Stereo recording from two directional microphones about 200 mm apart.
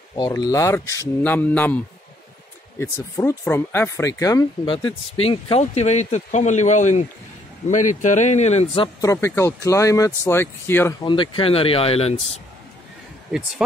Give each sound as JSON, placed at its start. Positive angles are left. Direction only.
{"t": 0.1, "sound": "speech", "side_deg": 20}
{"t": 2.8, "sound": "a man's voice", "side_deg": 15}
{"t": 9.1, "sound": "speech", "side_deg": 15}